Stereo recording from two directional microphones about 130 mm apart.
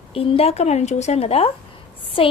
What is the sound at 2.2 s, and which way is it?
Speech, 40° left (ahead or behind).